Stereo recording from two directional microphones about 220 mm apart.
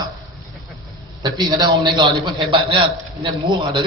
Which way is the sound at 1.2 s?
20° right (ahead or behind).